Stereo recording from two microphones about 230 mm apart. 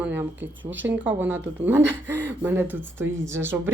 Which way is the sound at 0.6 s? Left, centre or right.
Right.